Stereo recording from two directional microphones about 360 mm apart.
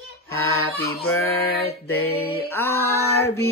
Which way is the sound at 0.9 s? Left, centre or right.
Left.